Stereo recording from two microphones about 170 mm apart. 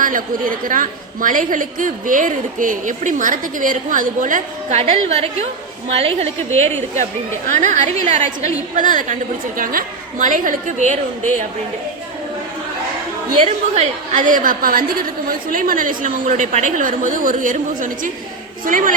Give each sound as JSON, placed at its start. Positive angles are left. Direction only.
{"t": 0.0, "sound": "a woman's voice", "side_deg": -55}
{"t": 4.8, "sound": "a woman's voice", "side_deg": -35}
{"t": 13.4, "sound": "a woman's voice", "side_deg": -40}